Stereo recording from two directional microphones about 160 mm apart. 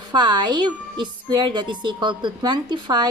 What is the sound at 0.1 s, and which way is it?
A woman's voice, 25° right (ahead or behind).